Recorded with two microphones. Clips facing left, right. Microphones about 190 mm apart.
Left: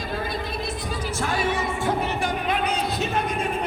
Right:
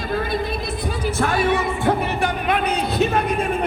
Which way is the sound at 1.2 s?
60° right (ahead or behind).